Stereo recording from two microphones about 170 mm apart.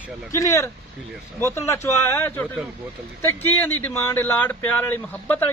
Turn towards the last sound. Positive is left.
turn(degrees=10)  # may be behind; listen again after turning